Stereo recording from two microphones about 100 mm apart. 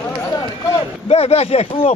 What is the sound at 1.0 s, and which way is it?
Speech, 90° left.